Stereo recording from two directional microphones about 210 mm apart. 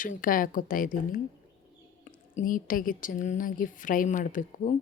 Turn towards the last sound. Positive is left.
turn(degrees=40)  # may be behind; listen again after turning